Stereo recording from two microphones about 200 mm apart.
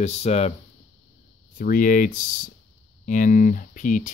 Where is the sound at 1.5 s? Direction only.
40° left (ahead or behind).